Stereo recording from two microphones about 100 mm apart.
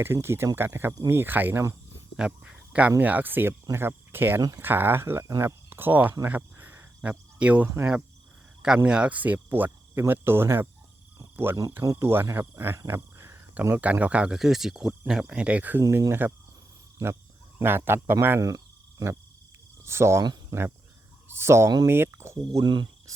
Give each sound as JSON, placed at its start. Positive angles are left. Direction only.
{"t": 0.0, "sound": "speech", "side_deg": -25}
{"t": 2.1, "sound": "speech", "side_deg": -10}
{"t": 6.2, "sound": "cricket", "side_deg": -20}
{"t": 8.8, "sound": "speech", "side_deg": -10}
{"t": 11.8, "sound": "speech", "side_deg": -30}
{"t": 12.8, "sound": "cricket", "side_deg": -30}
{"t": 13.5, "sound": "speech", "side_deg": -15}
{"t": 17.6, "sound": "speech", "side_deg": -25}
{"t": 20.2, "sound": "cricket", "side_deg": -40}
{"t": 21.2, "sound": "speech", "side_deg": -25}
{"t": 22.6, "sound": "speech", "side_deg": -50}